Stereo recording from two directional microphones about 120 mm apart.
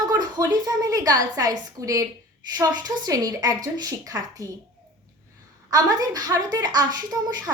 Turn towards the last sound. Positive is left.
turn(degrees=-35)  # may be behind; listen again after turning